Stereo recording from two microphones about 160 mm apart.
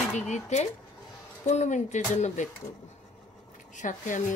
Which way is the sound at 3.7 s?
50° left (ahead or behind).